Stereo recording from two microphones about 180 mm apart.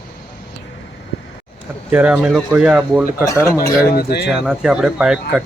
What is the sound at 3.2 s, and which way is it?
Speech, 15° left (ahead or behind).